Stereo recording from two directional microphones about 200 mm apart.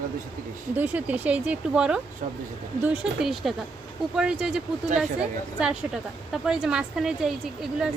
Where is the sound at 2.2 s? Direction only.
40° right (ahead or behind).